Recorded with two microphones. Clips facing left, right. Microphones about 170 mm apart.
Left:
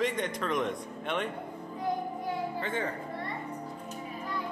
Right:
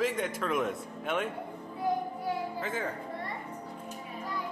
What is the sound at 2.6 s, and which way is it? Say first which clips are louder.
Speech: left 1 dB; centre (ahead or behind).